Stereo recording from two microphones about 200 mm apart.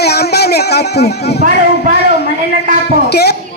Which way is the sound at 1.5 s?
55° left (ahead or behind).